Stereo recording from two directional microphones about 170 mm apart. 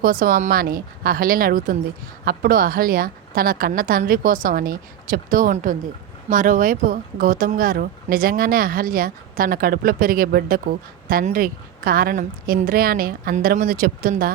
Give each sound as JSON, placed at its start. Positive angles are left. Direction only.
{"t": 0.0, "sound": "speech", "side_deg": -55}